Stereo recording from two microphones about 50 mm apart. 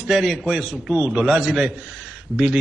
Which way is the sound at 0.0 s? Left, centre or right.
Centre.